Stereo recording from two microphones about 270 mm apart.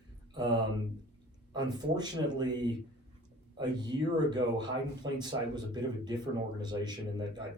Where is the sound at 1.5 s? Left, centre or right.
Centre.